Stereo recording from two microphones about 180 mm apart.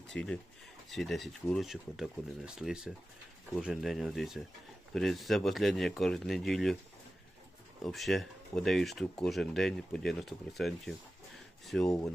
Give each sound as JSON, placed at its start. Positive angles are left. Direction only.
{"t": 0.1, "sound": "speech", "side_deg": 5}
{"t": 7.9, "sound": "speech", "side_deg": 0}
{"t": 11.9, "sound": "speech", "side_deg": 15}